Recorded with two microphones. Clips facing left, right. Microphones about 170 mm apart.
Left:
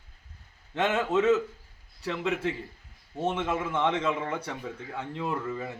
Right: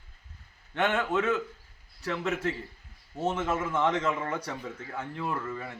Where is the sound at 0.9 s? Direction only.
20° left (ahead or behind).